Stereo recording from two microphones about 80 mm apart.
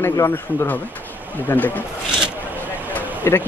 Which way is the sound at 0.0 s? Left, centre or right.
Left.